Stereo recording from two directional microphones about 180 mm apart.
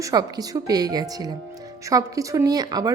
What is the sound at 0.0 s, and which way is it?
A woman's voice, 20° right (ahead or behind).